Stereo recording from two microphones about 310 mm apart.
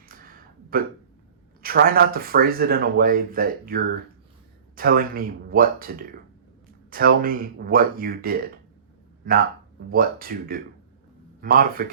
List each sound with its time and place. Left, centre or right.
0.1 s a sound: right
1.6 s speech: right
9.9 s speech: right